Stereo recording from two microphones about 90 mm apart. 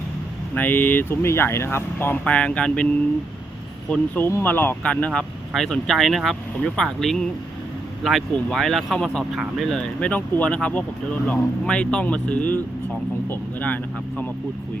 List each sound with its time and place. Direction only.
0.5 s speech: 20° left (ahead or behind)
2.1 s speech: 15° left (ahead or behind)
3.8 s speech: 15° left (ahead or behind)